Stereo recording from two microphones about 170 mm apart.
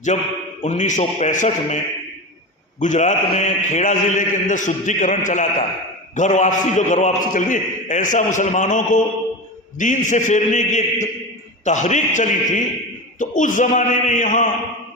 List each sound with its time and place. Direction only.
0.1 s a man's voice: 40° left (ahead or behind)
2.8 s a man's voice: 45° left (ahead or behind)